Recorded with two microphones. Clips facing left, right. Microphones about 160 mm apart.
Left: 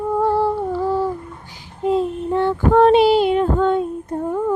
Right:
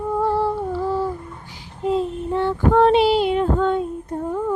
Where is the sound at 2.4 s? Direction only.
50° left (ahead or behind).